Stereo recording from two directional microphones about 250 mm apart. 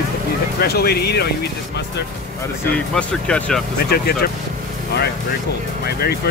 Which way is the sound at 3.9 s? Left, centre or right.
Left.